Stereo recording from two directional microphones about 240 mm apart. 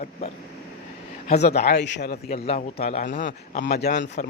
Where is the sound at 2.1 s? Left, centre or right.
Left.